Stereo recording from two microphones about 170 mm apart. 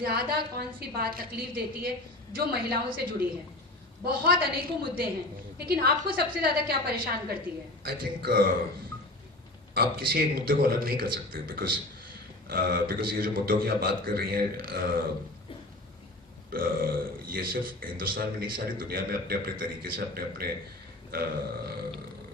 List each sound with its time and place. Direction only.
0.0 s a man's voice: 65° right (ahead or behind)
9.7 s a man's voice: 60° right (ahead or behind)
16.5 s a man's voice: 55° right (ahead or behind)